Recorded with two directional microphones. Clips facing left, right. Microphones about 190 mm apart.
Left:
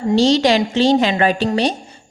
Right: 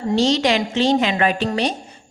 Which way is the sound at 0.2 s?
35° left (ahead or behind).